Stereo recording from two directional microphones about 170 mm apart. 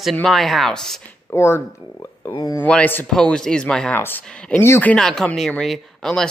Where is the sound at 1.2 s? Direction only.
15° left (ahead or behind).